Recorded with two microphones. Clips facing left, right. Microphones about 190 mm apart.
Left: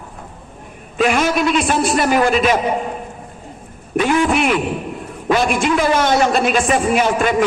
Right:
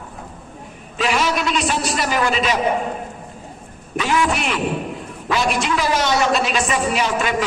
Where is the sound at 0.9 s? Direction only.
50° left (ahead or behind).